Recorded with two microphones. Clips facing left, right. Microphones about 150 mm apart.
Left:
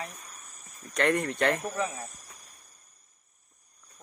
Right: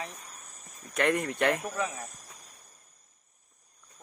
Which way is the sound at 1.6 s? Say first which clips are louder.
Left 1 dB; 15° left (ahead or behind).